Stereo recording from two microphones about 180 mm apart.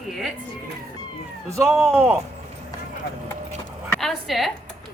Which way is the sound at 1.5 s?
15° right (ahead or behind).